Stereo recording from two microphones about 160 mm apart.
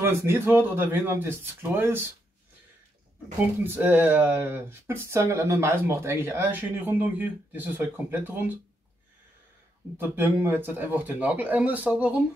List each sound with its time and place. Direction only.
0.0 s speech: 15° right (ahead or behind)
3.6 s speech: 15° right (ahead or behind)
9.9 s speech: 15° right (ahead or behind)